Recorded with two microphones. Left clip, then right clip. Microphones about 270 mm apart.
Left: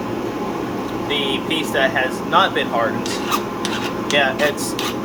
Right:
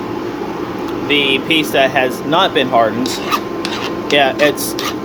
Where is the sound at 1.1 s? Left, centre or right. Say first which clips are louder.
Right 8 dB; right.